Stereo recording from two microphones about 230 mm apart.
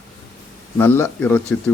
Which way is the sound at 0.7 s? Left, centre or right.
Centre.